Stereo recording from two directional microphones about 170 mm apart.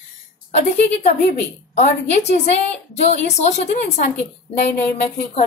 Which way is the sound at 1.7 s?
40° left (ahead or behind).